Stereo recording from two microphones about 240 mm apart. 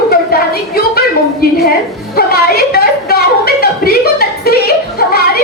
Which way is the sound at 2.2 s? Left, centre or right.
Left.